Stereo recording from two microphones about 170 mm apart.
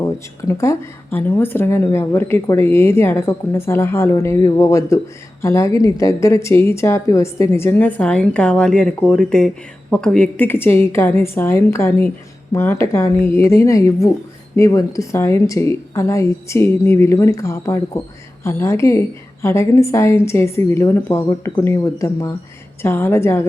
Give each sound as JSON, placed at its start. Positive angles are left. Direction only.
{"t": 0.0, "sound": "speech", "side_deg": 20}